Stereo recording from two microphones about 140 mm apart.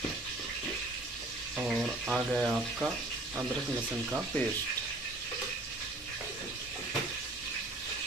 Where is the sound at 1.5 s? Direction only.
5° right (ahead or behind).